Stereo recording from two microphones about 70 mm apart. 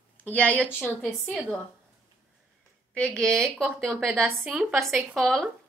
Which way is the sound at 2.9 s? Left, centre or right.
Centre.